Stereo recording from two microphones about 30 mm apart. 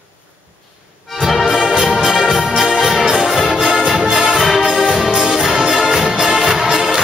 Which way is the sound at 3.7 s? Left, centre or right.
Centre.